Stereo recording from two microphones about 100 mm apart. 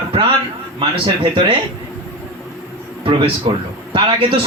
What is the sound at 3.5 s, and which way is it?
Speech, 55° right (ahead or behind).